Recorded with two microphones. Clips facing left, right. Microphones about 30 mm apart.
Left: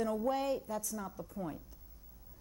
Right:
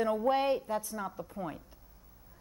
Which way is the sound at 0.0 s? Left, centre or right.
Right.